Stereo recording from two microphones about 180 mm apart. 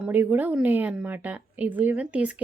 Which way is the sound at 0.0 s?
10° right (ahead or behind).